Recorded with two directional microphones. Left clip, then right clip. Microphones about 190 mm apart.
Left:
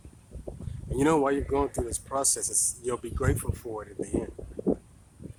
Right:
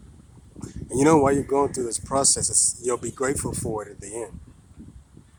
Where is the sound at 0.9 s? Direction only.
25° right (ahead or behind).